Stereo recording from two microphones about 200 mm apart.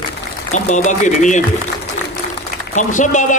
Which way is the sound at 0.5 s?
35° left (ahead or behind).